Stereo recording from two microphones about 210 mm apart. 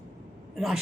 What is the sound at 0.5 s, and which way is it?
Speech, centre (ahead or behind).